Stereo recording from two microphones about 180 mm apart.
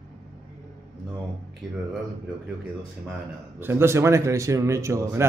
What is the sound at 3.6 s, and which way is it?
Speech, 15° right (ahead or behind).